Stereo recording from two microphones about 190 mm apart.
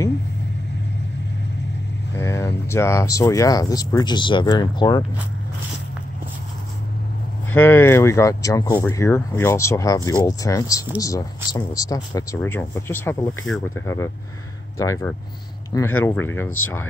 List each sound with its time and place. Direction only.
2.1 s speech: 15° left (ahead or behind)
7.5 s speech: 10° left (ahead or behind)